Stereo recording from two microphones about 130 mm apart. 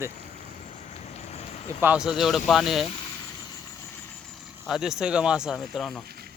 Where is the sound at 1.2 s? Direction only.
55° left (ahead or behind).